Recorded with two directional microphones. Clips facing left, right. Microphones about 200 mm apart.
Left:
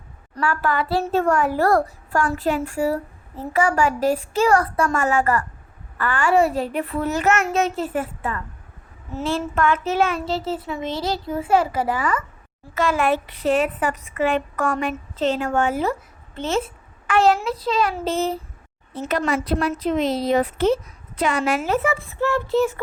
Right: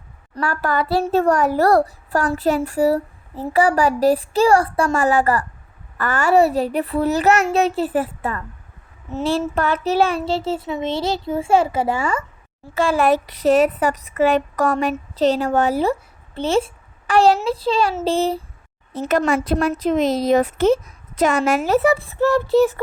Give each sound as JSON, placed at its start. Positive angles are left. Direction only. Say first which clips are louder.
{"t": 0.3, "sound": "a child's voice", "louder": "right 1 dB", "side_deg": -40}
{"t": 18.9, "sound": "a woman's voice", "louder": "right 4 dB", "side_deg": -45}